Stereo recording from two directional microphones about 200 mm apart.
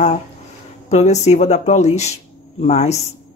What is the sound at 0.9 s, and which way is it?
Speech, 35° left (ahead or behind).